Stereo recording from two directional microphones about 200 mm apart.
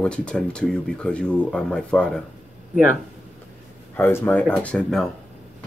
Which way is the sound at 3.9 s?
10° left (ahead or behind).